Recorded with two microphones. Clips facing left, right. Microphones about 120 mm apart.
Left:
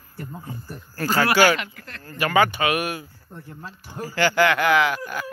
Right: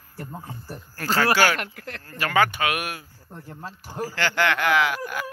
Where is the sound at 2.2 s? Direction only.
5° left (ahead or behind).